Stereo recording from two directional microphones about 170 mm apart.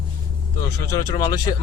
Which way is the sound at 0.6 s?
20° left (ahead or behind).